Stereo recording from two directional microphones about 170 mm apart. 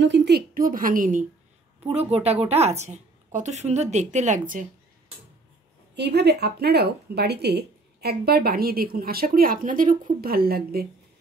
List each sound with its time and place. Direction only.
0.0 s a woman's voice: 85° right; by 1.2 s 50° right (ahead or behind)
1.8 s a woman's voice: 35° right (ahead or behind)
5.9 s speech: 75° right (ahead or behind)